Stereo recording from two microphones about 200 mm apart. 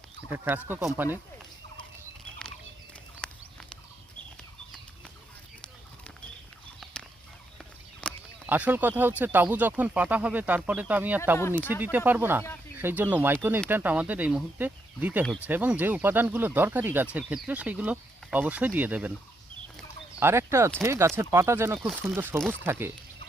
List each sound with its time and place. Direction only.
0.3 s speech: 10° right (ahead or behind)
8.0 s a sound: 5° left (ahead or behind)
8.4 s speech: 10° right (ahead or behind)
20.1 s speech: 10° right (ahead or behind)
21.8 s speech: centre (ahead or behind)
22.1 s speech: 10° right (ahead or behind)